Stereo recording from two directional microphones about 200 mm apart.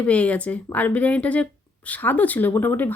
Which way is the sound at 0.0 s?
5° left (ahead or behind).